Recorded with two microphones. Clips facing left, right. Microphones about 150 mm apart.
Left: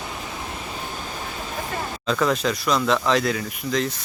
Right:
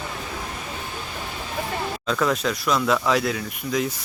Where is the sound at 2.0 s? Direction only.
Centre (ahead or behind).